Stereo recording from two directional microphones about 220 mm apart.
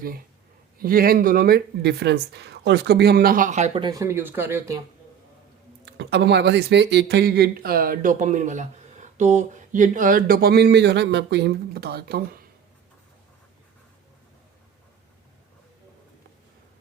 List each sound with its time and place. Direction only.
0.8 s speech: 40° right (ahead or behind)
3.8 s speech: 15° right (ahead or behind)
5.8 s speech: 50° right (ahead or behind)